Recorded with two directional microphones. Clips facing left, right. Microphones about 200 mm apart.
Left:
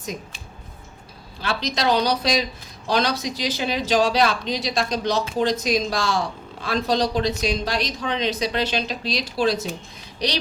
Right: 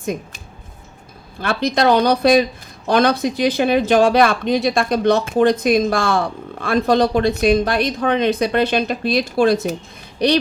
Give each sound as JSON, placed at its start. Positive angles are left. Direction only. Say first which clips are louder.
{"t": 0.0, "sound": "speech", "louder": "right 8 dB", "side_deg": -55}